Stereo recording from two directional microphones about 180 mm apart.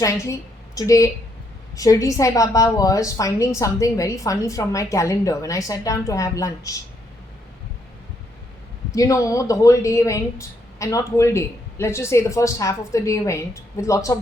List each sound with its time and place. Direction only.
0.0 s a woman's voice: 15° left (ahead or behind)
9.0 s a woman's voice: 20° left (ahead or behind)